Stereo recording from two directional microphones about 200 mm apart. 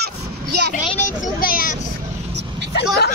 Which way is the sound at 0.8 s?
35° left (ahead or behind).